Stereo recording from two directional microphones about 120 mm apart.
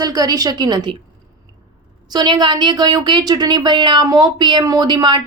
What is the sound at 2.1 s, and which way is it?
A woman's voice, 35° right (ahead or behind).